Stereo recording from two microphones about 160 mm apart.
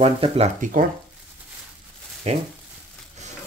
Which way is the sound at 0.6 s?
60° right (ahead or behind).